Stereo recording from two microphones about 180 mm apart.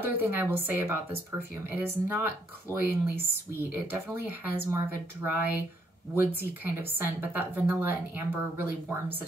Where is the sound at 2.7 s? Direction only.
15° left (ahead or behind).